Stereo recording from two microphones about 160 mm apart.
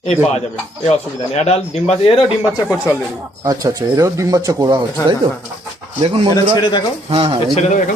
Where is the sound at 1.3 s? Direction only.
45° left (ahead or behind).